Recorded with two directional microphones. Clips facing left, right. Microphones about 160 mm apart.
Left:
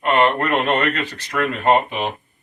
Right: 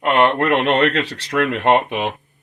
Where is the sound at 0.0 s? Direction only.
85° right.